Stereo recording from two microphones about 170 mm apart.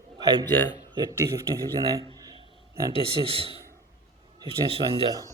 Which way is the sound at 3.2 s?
35° right (ahead or behind).